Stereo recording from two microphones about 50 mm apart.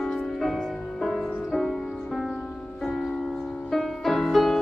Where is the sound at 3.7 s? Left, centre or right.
Centre.